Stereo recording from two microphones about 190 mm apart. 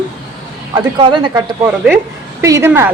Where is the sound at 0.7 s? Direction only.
25° right (ahead or behind).